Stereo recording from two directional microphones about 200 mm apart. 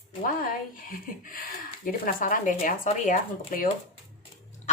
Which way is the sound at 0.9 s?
45° left (ahead or behind).